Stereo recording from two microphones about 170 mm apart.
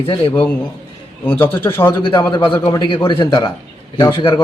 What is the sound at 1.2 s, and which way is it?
A man's voice, 10° left (ahead or behind).